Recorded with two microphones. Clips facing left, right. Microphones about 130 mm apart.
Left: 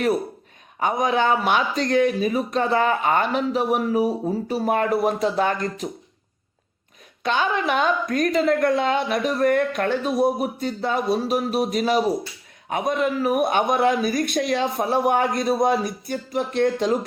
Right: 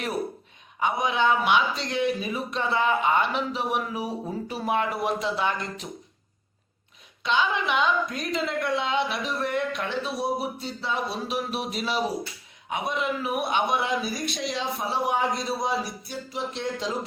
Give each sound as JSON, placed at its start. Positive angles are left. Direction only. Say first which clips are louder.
{"t": 0.8, "sound": "speech", "louder": "left 4 dB", "side_deg": 45}
{"t": 7.2, "sound": "speech", "louder": "left 3 dB", "side_deg": 50}